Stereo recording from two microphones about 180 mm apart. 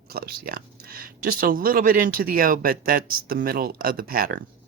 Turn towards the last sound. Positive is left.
turn(degrees=-55)  # may be behind; listen again after turning